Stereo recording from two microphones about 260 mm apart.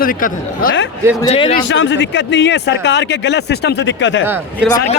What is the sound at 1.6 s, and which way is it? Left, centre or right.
Speech, left.